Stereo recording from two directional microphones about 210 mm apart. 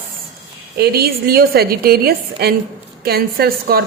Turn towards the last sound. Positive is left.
turn(degrees=-45)  # may be behind; listen again after turning